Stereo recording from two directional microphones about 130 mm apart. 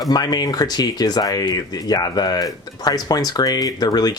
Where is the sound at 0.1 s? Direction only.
30° left (ahead or behind).